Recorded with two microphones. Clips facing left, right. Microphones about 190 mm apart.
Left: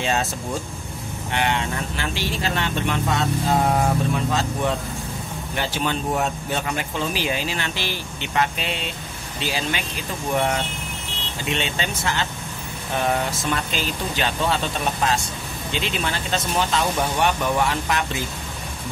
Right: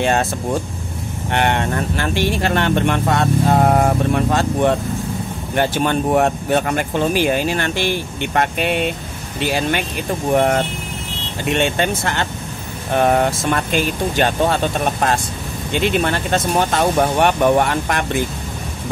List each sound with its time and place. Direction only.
0.0 s speech: 55° right (ahead or behind)
1.3 s speech: 55° right (ahead or behind)